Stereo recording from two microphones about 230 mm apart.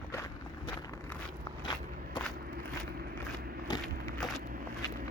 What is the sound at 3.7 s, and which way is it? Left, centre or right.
Crushing, centre.